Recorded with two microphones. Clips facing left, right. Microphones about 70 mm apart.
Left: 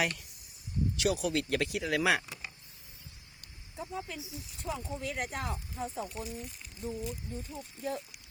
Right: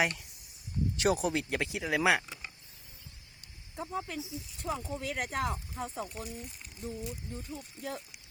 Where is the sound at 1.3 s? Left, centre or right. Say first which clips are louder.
Left 2 dB; centre.